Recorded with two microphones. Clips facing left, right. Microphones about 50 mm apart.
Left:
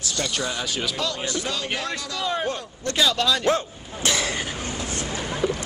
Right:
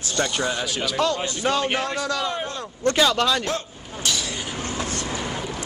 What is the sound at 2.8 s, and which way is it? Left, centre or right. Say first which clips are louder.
Speech: right 3 dB; right.